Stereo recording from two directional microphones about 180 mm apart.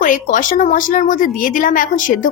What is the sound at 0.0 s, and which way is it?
A woman's voice, 45° left (ahead or behind).